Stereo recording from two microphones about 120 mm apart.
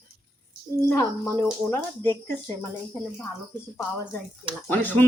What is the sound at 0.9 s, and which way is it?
Speech, 20° left (ahead or behind).